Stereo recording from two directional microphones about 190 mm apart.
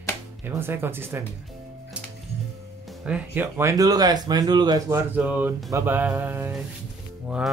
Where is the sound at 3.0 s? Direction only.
10° right (ahead or behind).